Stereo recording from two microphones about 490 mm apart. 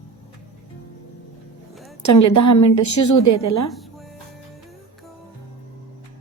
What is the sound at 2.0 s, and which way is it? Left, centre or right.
A woman's voice, left.